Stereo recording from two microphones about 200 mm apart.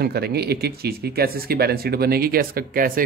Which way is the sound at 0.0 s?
50° right (ahead or behind).